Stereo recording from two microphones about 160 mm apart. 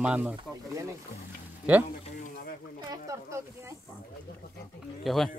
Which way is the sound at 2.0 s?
55° left (ahead or behind).